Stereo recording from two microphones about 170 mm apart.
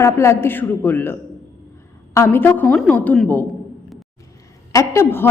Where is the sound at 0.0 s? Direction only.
15° left (ahead or behind).